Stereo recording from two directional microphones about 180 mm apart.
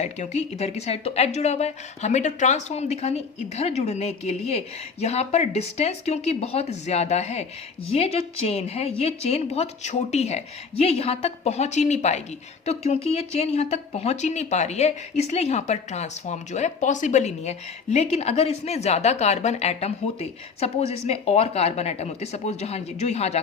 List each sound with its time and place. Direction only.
0.0 s speech: 40° left (ahead or behind)